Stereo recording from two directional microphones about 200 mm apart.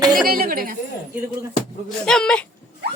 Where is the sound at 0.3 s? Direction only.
45° right (ahead or behind).